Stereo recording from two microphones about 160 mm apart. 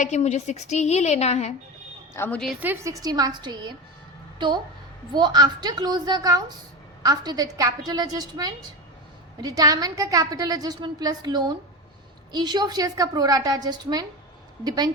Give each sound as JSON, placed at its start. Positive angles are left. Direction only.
{"t": 0.0, "sound": "a woman's voice", "side_deg": 45}
{"t": 2.1, "sound": "a woman's voice", "side_deg": 15}
{"t": 2.6, "sound": "a woman's voice", "side_deg": -15}
{"t": 5.1, "sound": "a woman's voice", "side_deg": -25}